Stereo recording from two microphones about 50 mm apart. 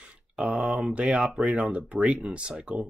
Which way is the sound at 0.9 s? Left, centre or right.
Centre.